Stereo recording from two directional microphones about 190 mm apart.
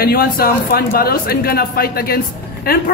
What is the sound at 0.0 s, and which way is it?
Speech, 55° left (ahead or behind).